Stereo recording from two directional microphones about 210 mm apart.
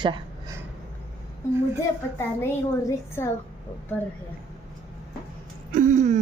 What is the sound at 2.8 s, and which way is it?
Speech, 10° left (ahead or behind).